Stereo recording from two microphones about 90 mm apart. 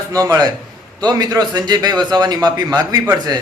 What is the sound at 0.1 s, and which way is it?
A man's voice, 40° right (ahead or behind).